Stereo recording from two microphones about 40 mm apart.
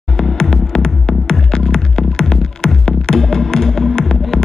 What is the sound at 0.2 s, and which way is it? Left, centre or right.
Music, centre.